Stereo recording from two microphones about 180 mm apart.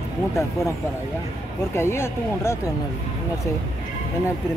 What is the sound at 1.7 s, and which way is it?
Speech, 15° left (ahead or behind).